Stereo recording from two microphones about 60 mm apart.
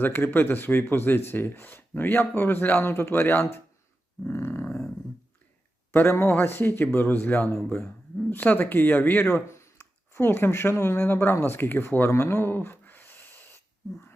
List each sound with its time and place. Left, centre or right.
0.0 s speech: left
4.3 s dog: left
5.9 s speech: left
12.1 s a sound: left